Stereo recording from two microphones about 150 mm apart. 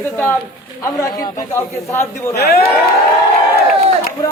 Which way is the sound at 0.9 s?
20° left (ahead or behind).